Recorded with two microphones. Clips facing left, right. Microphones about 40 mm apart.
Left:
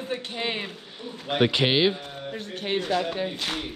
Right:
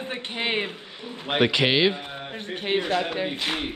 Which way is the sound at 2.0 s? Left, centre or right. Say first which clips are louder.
Even; right.